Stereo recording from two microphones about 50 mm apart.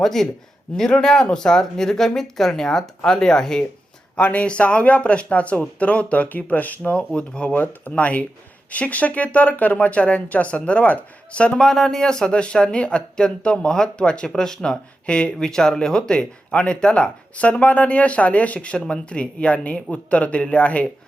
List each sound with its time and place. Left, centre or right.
0.0 s speech: centre
4.2 s speech: left
7.1 s speech: centre
7.5 s speech: left
11.6 s speech: centre; by 20.8 s left